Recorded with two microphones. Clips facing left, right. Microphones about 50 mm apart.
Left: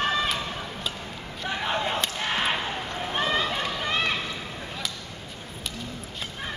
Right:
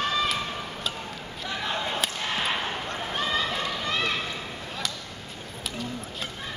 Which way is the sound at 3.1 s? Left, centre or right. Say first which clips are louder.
Left 2 dB; left.